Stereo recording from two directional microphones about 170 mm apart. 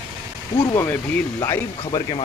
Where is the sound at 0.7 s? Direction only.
15° left (ahead or behind).